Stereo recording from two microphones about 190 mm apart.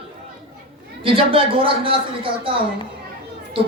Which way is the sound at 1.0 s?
30° right (ahead or behind).